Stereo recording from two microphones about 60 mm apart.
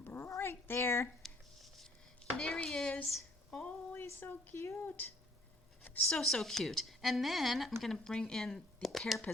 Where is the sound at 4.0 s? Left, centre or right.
Left.